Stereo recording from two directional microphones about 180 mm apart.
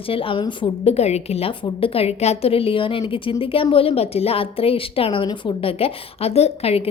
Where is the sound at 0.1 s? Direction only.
30° left (ahead or behind).